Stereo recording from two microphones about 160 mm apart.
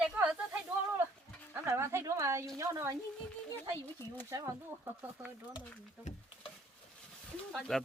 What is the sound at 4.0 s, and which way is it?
Speech, 15° left (ahead or behind).